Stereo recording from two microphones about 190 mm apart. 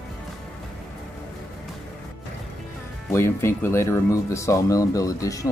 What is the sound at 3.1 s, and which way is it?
Speech, 15° left (ahead or behind).